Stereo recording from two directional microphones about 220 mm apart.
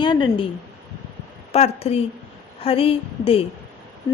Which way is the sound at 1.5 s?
30° left (ahead or behind).